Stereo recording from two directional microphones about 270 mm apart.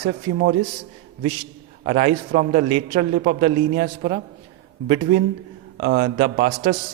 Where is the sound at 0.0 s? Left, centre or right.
Right.